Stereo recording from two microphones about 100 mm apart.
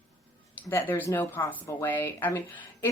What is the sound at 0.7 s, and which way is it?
A woman's voice, 25° left (ahead or behind).